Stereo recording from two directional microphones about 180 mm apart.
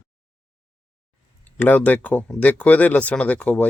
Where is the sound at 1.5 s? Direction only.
10° left (ahead or behind).